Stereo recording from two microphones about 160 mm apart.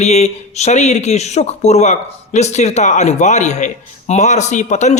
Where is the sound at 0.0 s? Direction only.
45° left (ahead or behind).